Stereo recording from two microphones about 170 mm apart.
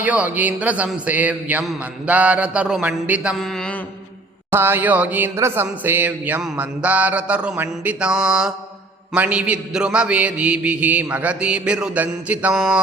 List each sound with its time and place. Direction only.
0.0 s speech: 10° right (ahead or behind)
4.5 s speech: 15° right (ahead or behind)